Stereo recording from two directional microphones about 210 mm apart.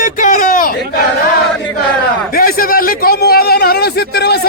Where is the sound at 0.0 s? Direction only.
40° left (ahead or behind).